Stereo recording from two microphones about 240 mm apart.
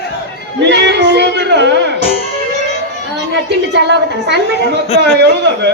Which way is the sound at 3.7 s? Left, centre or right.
Right.